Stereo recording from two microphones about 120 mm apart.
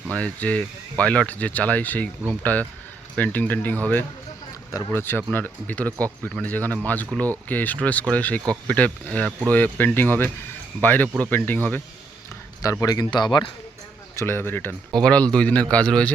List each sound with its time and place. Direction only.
0.1 s speech: 10° left (ahead or behind)
12.8 s speech: 30° left (ahead or behind)
14.2 s speech: 20° left (ahead or behind)